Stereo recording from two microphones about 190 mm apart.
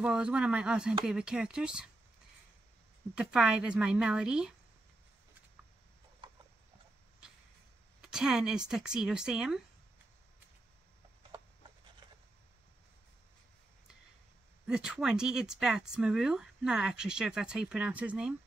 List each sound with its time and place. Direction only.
0.0 s speech: 5° right (ahead or behind)
3.2 s speech: 5° right (ahead or behind)
6.2 s horse: 25° right (ahead or behind)
8.0 s speech: 5° right (ahead or behind)
14.7 s speech: 5° right (ahead or behind)